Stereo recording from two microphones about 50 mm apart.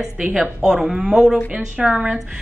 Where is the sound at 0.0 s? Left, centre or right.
Centre.